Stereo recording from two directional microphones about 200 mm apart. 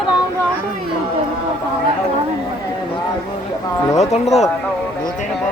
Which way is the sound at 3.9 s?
35° left (ahead or behind).